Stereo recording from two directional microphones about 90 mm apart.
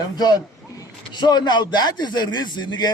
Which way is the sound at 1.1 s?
50° left (ahead or behind).